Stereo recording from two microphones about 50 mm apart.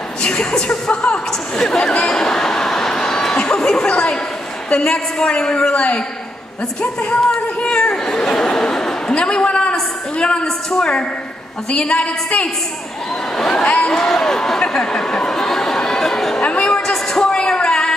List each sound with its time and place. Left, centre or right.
0.2 s speech: centre
3.9 s a woman's voice: left
6.8 s a sound: centre
10.8 s a woman's voice: left
13.5 s speech: left
16.3 s a sound: left